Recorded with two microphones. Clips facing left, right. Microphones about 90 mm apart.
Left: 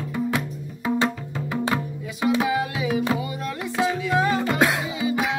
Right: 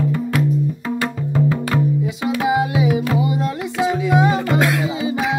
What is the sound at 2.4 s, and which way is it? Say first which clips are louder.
Music: right 6 dB; 20° right (ahead or behind).